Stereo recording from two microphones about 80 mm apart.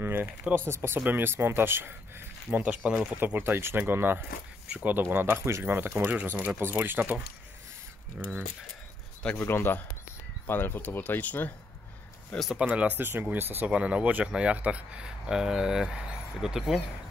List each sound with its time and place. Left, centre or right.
0.0 s speech: right
8.2 s speech: centre
9.4 s speech: left
12.5 s speech: centre
13.7 s speech: centre